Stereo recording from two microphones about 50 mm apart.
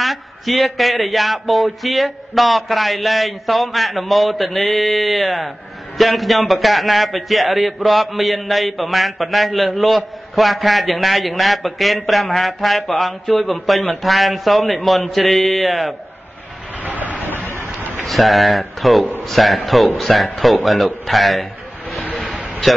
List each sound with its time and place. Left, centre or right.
0.0 s a man's voice: centre
16.8 s train: right
18.0 s a man's voice: centre